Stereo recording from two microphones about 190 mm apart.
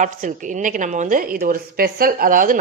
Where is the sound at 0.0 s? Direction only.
40° right (ahead or behind).